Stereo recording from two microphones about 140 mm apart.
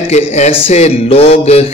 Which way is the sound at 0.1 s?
50° left (ahead or behind).